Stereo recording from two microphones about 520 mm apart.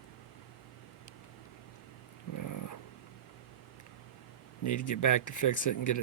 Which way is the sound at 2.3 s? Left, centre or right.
Left.